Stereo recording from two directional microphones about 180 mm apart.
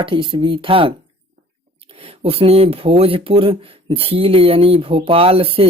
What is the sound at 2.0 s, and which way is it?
Speech, 35° right (ahead or behind).